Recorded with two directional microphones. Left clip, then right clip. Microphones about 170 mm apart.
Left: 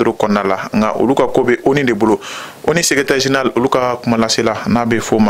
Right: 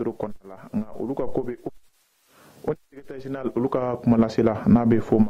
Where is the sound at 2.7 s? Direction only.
10° left (ahead or behind).